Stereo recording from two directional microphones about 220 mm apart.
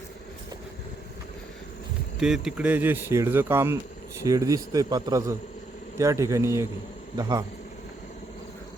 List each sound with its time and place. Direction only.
2.1 s speech: centre (ahead or behind)